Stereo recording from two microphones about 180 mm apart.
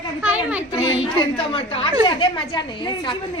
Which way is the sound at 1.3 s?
30° left (ahead or behind).